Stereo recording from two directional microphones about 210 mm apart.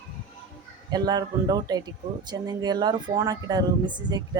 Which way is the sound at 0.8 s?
20° right (ahead or behind).